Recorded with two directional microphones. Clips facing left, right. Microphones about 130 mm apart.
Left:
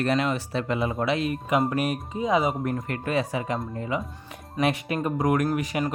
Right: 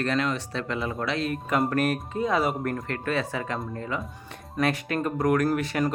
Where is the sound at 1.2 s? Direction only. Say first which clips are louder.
Left 1 dB; centre (ahead or behind).